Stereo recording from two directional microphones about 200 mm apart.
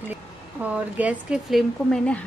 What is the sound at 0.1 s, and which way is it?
A woman's voice, 5° right (ahead or behind).